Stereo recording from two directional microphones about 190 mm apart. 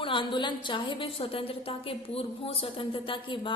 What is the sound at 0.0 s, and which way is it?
A woman's voice, 25° left (ahead or behind).